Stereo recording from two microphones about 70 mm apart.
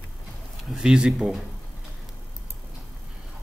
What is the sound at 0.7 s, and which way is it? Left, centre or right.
Speech, centre.